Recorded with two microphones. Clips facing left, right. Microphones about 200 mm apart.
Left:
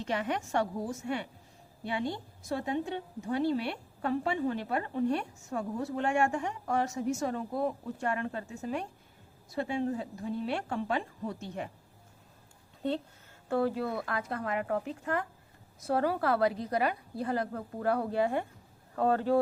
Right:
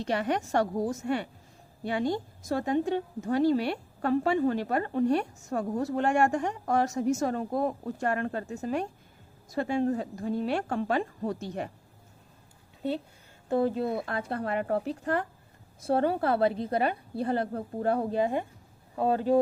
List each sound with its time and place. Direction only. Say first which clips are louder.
0.1 s a woman's voice: right 4 dB; 40° right (ahead or behind)
13.5 s a woman's voice: right 3 dB; 20° right (ahead or behind)